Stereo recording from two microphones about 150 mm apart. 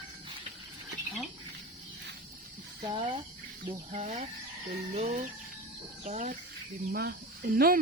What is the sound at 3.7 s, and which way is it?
Speech, 45° right (ahead or behind).